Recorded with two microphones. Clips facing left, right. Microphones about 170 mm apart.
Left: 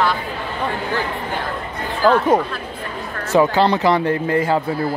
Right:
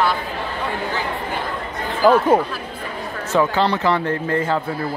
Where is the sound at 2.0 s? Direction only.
Centre (ahead or behind).